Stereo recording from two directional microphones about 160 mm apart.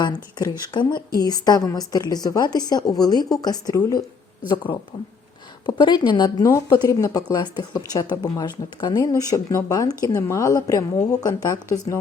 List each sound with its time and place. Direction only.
0.0 s speech: 25° left (ahead or behind)